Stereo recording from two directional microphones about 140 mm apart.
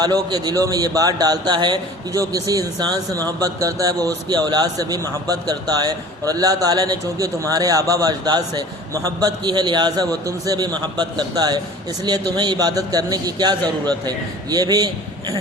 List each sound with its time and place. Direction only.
0.0 s a man's voice: 30° right (ahead or behind)